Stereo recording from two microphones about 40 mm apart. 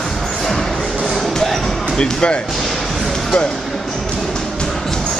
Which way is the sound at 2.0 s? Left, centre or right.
Centre.